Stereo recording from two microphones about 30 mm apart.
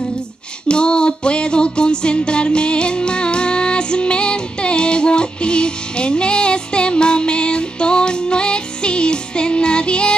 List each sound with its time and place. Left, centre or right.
0.7 s music: left